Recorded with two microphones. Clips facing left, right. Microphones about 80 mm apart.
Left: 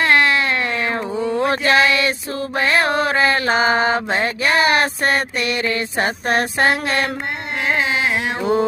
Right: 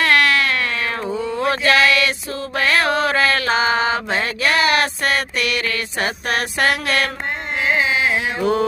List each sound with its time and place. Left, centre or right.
0.0 s cat: left